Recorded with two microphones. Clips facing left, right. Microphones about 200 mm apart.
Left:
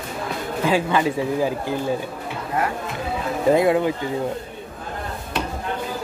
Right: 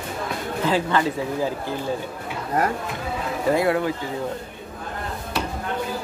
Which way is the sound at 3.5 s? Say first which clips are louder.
Left 3 dB; 20° left (ahead or behind).